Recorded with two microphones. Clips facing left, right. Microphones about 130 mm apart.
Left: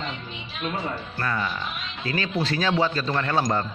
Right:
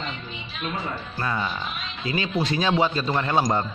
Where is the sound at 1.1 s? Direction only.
20° right (ahead or behind).